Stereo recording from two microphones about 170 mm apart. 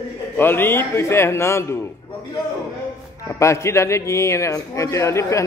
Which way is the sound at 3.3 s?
15° left (ahead or behind).